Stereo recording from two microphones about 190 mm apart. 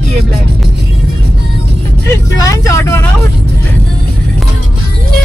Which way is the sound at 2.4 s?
15° left (ahead or behind).